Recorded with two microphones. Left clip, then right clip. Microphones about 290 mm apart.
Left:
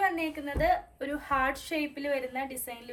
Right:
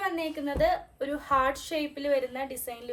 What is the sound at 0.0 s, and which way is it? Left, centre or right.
A woman's voice, centre.